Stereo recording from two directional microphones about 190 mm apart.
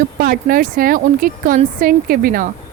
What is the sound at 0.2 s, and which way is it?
Speech, 50° right (ahead or behind).